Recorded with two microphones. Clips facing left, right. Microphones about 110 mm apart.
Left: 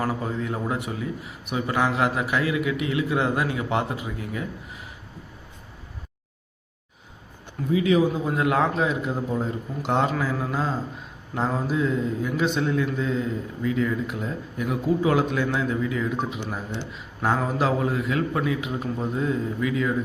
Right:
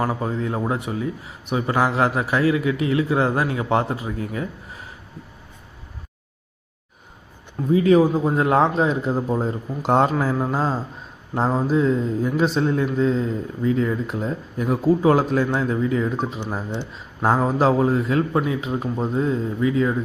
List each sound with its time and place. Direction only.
0.0 s speech: 30° right (ahead or behind)
7.7 s speech: 40° right (ahead or behind)